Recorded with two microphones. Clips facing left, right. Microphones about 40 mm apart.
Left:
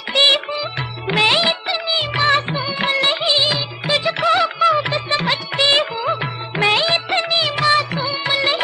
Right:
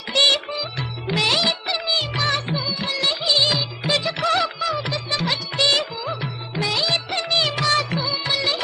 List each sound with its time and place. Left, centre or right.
0.1 s music of bollywood: left
3.4 s music: centre
4.6 s music of bollywood: left
7.2 s music of bollywood: centre